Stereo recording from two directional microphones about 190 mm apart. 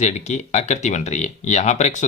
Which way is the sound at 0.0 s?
35° left (ahead or behind).